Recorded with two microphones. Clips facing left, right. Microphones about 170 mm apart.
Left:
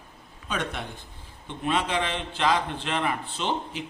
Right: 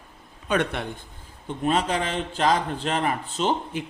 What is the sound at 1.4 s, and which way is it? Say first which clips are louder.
A man's voice: right 4 dB; 40° right (ahead or behind).